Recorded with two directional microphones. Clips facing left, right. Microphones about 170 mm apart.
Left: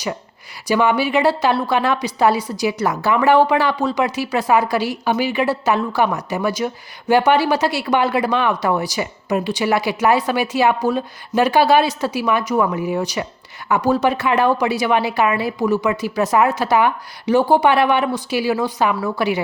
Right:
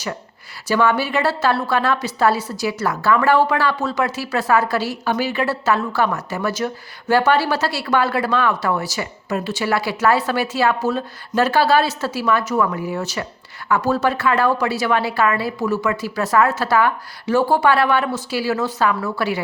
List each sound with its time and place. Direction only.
0.7 s a woman's voice: 15° left (ahead or behind)